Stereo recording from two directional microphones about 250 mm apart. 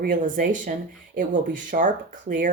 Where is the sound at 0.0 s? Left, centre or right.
Right.